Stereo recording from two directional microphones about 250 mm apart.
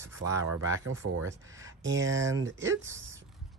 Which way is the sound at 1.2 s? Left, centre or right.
Centre.